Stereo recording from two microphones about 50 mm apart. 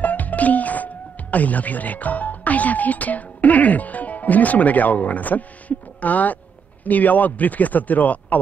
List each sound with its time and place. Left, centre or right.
0.0 s speech: left